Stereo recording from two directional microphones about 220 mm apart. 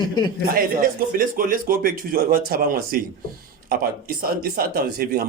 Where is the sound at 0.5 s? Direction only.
40° right (ahead or behind).